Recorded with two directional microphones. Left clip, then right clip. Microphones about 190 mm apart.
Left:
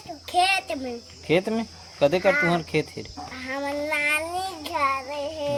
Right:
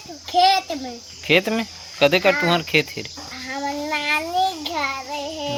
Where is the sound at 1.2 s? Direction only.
20° right (ahead or behind).